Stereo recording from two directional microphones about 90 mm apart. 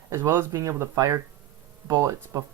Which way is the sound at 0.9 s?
35° right (ahead or behind).